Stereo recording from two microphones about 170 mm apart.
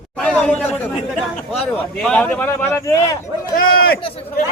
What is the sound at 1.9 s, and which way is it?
Speech, 5° left (ahead or behind).